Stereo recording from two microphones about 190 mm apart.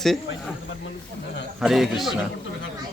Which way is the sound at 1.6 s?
Centre (ahead or behind).